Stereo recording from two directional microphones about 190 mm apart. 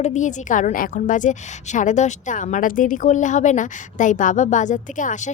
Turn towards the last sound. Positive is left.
turn(degrees=40)  # may be behind; listen again after turning